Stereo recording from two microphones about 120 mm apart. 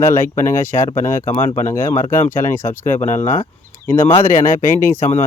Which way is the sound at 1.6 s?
90° left.